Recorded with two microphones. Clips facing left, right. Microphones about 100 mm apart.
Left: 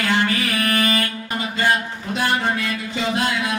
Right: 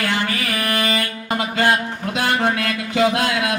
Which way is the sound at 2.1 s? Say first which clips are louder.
Right 1 dB; 80° right.